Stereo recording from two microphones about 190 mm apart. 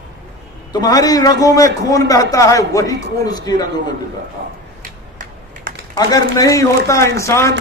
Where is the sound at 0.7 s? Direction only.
20° left (ahead or behind).